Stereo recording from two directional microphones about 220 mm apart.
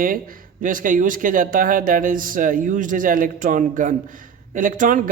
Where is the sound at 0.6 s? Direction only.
40° right (ahead or behind).